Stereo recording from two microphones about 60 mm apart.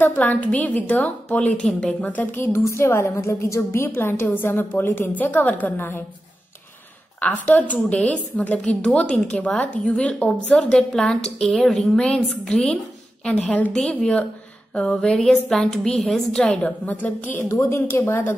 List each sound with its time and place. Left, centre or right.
0.0 s a woman's voice: left
2.3 s a woman's voice: left
7.2 s a woman's voice: left; by 15.1 s centre
15.1 s a woman's voice: centre
16.4 s a woman's voice: left
17.6 s speech: left